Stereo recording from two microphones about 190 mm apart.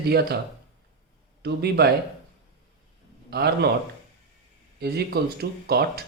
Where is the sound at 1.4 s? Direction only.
60° right (ahead or behind).